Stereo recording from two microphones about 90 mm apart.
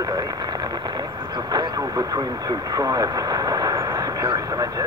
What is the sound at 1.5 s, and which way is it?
Speech, 50° right (ahead or behind).